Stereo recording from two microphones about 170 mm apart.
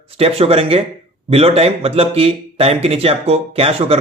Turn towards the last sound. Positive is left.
turn(degrees=-35)  # may be behind; listen again after turning